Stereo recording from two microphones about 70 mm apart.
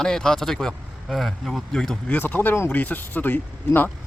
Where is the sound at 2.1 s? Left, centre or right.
Left.